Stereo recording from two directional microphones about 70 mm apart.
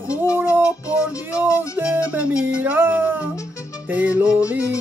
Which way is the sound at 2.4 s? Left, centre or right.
Right.